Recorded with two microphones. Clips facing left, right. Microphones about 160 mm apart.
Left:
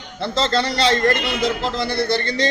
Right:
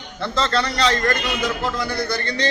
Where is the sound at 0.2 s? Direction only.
30° left (ahead or behind).